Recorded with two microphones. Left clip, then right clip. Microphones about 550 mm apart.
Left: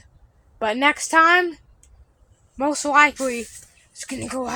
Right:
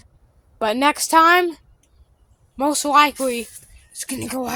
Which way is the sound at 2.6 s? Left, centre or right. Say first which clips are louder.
Right 1 dB; right.